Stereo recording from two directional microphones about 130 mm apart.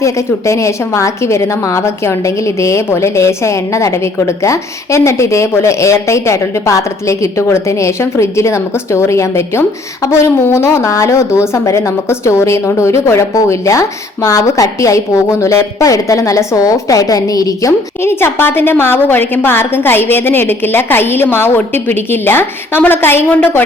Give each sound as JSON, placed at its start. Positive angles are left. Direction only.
{"t": 0.0, "sound": "a woman's voice", "side_deg": 25}